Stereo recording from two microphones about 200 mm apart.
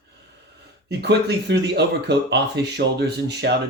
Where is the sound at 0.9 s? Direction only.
60° right (ahead or behind).